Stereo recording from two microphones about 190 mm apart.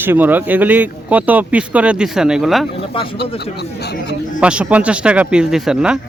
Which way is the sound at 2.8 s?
30° left (ahead or behind).